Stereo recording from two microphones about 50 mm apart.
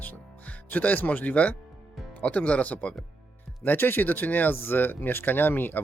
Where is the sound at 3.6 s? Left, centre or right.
Left.